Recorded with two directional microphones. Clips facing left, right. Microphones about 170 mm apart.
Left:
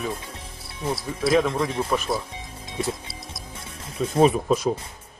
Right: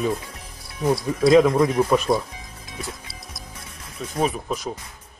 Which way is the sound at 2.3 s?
25° left (ahead or behind).